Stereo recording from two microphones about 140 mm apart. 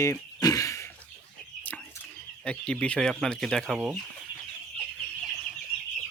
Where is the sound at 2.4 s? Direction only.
5° left (ahead or behind).